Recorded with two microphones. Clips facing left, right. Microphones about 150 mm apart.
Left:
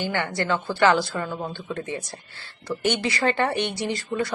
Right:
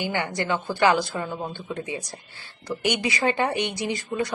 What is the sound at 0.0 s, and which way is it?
A woman's voice, 15° right (ahead or behind).